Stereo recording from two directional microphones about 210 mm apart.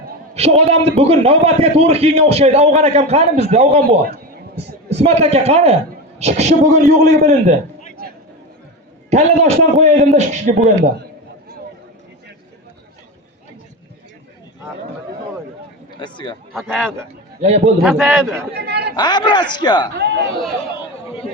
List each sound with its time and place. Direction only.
0.3 s a man's voice: 30° right (ahead or behind)
9.0 s a man's voice: 30° right (ahead or behind)
16.0 s speech: 20° left (ahead or behind)
16.6 s a man's voice: centre (ahead or behind)
17.4 s a man's voice: 30° right (ahead or behind)
17.8 s a man's voice: centre (ahead or behind)
18.5 s chatter: 50° right (ahead or behind)
18.9 s a man's voice: 20° left (ahead or behind)
20.0 s speech: 55° right (ahead or behind)